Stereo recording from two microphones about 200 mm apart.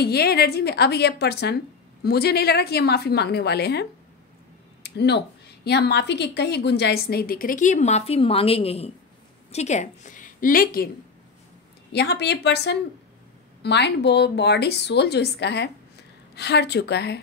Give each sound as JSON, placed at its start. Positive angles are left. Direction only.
{"t": 0.0, "sound": "a woman's voice", "side_deg": 55}
{"t": 4.8, "sound": "a woman's voice", "side_deg": 55}
{"t": 11.9, "sound": "a woman's voice", "side_deg": 55}